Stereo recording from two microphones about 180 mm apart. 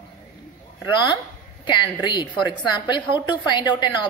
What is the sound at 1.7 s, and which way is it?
A woman's voice, 25° left (ahead or behind).